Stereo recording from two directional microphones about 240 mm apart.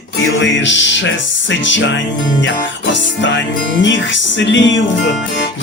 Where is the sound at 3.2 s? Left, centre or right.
Left.